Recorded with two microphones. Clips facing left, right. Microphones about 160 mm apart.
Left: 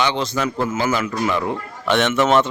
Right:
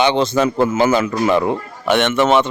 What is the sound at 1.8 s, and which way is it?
Speech, 5° right (ahead or behind).